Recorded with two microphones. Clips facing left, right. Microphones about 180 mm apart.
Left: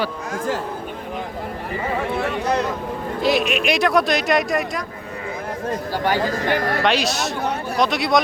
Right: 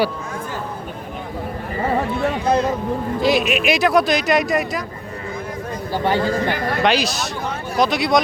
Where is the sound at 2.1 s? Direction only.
70° left (ahead or behind).